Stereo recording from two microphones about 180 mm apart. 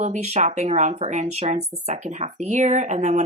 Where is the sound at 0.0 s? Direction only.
40° right (ahead or behind).